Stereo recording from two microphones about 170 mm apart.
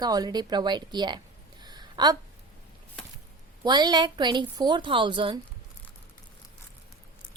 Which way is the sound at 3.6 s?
25° right (ahead or behind).